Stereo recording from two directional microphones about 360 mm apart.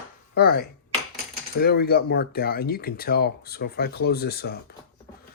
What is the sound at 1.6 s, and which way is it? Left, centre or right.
Speech, left.